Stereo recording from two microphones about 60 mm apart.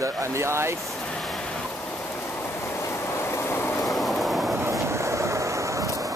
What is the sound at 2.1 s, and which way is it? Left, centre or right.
Vehicle, left.